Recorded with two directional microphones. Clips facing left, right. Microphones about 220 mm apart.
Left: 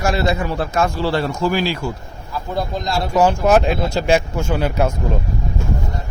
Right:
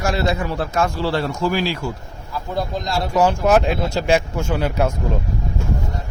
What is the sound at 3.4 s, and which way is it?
Speech, 35° left (ahead or behind).